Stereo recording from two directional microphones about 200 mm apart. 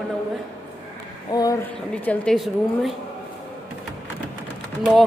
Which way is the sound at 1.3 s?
20° left (ahead or behind).